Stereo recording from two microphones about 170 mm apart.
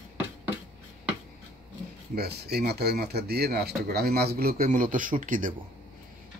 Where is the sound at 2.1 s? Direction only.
70° right (ahead or behind); by 5.6 s 50° right (ahead or behind).